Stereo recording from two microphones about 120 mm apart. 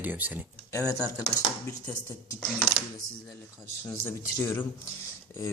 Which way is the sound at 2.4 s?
Centre (ahead or behind).